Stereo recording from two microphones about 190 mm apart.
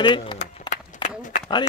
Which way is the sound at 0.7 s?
40° left (ahead or behind).